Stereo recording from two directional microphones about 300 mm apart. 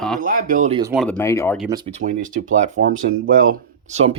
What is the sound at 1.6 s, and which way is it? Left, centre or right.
Speech, centre.